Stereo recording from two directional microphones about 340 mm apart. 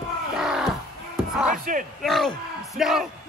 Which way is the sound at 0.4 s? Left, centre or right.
Centre.